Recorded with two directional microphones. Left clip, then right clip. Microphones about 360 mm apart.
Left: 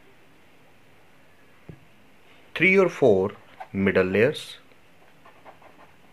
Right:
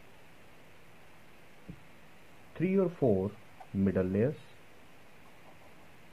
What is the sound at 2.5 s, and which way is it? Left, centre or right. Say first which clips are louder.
Speech: left 12 dB; centre.